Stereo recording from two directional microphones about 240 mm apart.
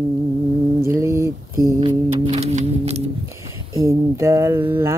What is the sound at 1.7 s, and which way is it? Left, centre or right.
Music, right.